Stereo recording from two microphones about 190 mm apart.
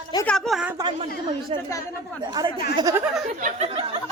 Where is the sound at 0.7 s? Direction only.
25° right (ahead or behind).